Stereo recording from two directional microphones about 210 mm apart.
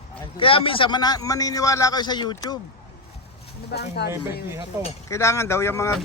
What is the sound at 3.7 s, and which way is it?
Speech, 50° left (ahead or behind).